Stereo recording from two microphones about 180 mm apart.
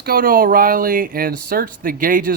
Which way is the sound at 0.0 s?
55° right (ahead or behind).